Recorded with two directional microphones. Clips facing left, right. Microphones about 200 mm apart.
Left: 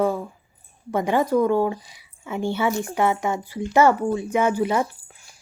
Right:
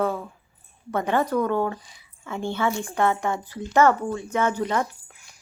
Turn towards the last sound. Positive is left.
turn(degrees=10)  # may be behind; listen again after turning